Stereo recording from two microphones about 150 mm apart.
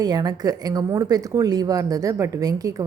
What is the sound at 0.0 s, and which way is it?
Speech, 25° right (ahead or behind).